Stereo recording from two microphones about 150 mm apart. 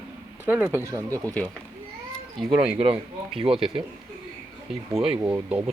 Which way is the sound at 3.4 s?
35° right (ahead or behind).